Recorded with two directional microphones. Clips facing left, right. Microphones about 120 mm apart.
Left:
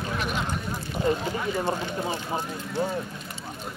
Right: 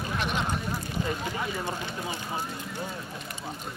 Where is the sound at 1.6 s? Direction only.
15° left (ahead or behind).